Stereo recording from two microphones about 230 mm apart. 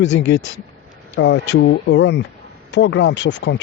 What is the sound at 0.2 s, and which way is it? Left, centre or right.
Speech, left.